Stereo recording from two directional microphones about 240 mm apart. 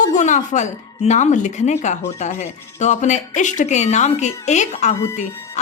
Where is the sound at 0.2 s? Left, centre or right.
Left.